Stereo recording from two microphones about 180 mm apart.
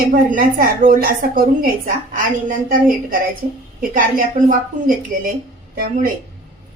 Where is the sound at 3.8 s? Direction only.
50° right (ahead or behind).